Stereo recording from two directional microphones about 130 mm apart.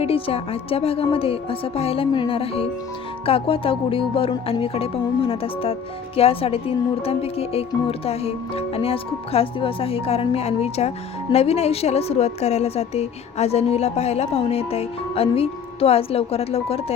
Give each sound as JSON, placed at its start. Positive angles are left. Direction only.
{"t": 0.0, "sound": "speech", "side_deg": 50}